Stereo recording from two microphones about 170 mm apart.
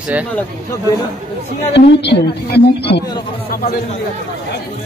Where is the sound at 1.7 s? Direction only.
80° left.